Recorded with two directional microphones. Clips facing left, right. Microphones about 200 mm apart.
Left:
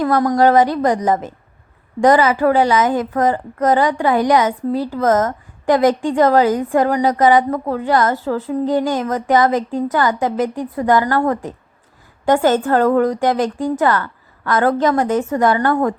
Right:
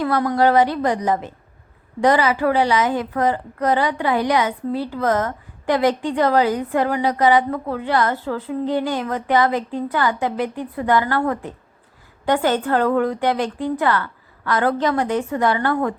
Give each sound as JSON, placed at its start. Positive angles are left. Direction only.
{"t": 0.0, "sound": "a woman's voice", "side_deg": 45}